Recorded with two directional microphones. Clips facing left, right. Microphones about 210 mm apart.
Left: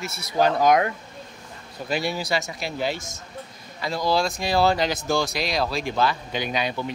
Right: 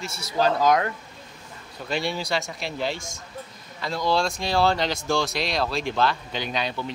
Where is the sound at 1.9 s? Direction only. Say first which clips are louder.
Left 1 dB; 10° left (ahead or behind).